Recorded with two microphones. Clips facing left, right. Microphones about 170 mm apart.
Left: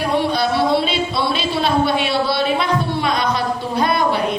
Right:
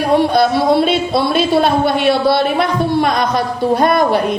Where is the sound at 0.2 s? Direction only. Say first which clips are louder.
Right 5 dB; 50° right (ahead or behind).